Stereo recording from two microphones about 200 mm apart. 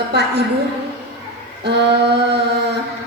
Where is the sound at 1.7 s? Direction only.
55° right (ahead or behind).